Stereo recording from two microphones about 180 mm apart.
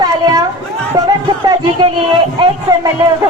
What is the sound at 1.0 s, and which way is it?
Speech, 20° right (ahead or behind).